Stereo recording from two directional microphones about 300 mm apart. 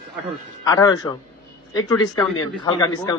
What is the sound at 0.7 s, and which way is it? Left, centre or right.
A man's voice, centre.